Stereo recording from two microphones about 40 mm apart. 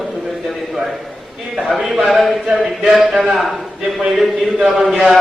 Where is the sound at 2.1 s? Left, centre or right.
Centre.